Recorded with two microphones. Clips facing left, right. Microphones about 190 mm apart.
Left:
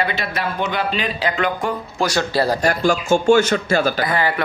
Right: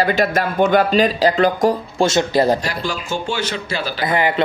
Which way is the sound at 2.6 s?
45° left (ahead or behind).